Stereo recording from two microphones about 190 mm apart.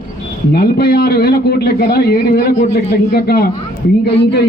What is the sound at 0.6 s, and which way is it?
A man's voice, 55° left (ahead or behind).